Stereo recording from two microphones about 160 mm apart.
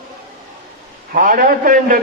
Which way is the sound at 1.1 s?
60° right (ahead or behind).